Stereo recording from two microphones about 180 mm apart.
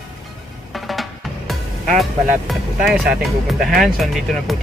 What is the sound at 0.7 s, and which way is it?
Music, centre (ahead or behind).